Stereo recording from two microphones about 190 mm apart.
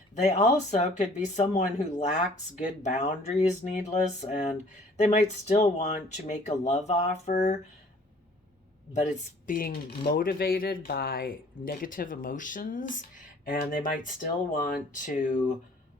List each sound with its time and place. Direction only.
0.1 s speech: 35° left (ahead or behind)
9.5 s speech: 45° left (ahead or behind)